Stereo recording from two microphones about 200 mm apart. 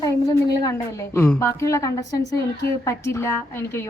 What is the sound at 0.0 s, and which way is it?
A woman's voice, 20° left (ahead or behind).